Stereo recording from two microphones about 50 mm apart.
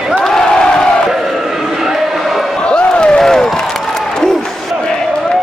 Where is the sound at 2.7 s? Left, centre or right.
Centre.